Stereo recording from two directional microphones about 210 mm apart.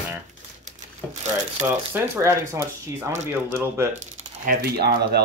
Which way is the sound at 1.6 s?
10° right (ahead or behind).